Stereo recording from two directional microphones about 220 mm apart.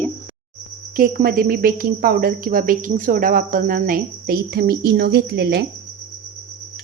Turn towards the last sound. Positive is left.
turn(degrees=-45)  # may be behind; listen again after turning